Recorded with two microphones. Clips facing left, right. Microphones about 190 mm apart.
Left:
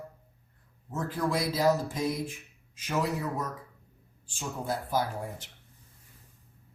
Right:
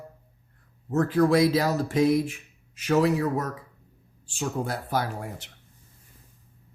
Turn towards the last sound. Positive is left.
turn(degrees=-70)  # may be behind; listen again after turning